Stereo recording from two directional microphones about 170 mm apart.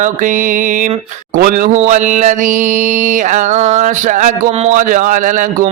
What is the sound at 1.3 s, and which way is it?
Speech, 55° right (ahead or behind).